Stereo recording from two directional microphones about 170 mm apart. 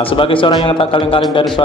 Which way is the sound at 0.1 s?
30° left (ahead or behind).